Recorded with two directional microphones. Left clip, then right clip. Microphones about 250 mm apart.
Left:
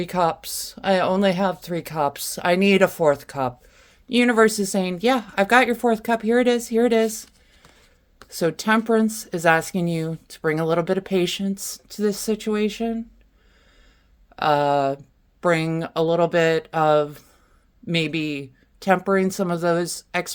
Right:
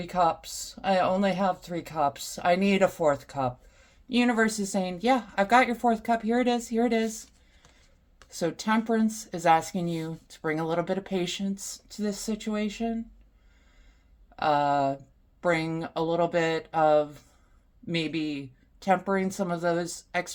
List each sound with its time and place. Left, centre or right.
0.0 s speech: left
8.3 s speech: left
14.3 s speech: left